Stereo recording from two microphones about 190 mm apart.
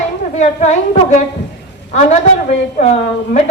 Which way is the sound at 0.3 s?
35° left (ahead or behind).